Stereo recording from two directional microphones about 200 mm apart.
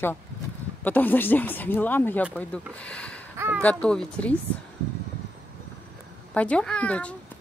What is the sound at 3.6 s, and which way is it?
Speech, 5° left (ahead or behind).